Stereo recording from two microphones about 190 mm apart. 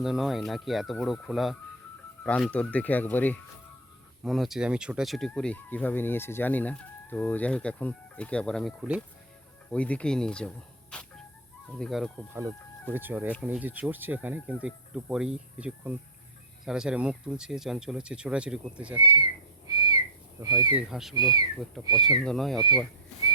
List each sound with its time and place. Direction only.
0.0 s speech: centre (ahead or behind)
10.9 s music: 5° left (ahead or behind)
11.8 s speech: centre (ahead or behind)
12.9 s speech: 10° right (ahead or behind)
20.4 s speech: 20° right (ahead or behind)
20.7 s speech: centre (ahead or behind)
21.2 s speech: 20° right (ahead or behind)
22.2 s speech: centre (ahead or behind)